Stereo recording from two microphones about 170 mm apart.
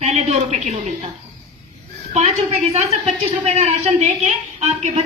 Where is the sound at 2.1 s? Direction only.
40° right (ahead or behind).